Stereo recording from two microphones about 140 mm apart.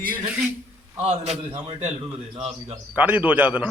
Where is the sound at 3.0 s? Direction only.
10° right (ahead or behind).